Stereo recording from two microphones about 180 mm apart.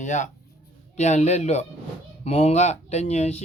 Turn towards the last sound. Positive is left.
turn(degrees=35)  # may be behind; listen again after turning